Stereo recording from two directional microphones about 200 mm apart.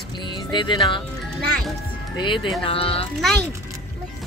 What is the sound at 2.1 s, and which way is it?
Speech, 25° left (ahead or behind).